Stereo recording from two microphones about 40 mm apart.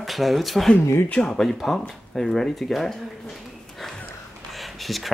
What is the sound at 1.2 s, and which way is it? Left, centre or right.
Speech, left.